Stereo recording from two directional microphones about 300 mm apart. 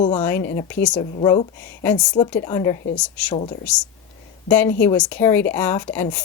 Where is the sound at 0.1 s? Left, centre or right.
Centre.